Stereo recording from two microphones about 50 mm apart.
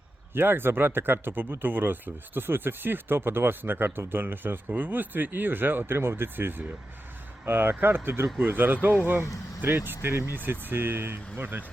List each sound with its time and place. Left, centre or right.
0.3 s speech: right
8.4 s speech: right